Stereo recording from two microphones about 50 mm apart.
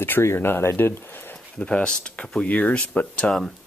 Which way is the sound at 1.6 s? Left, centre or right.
Left.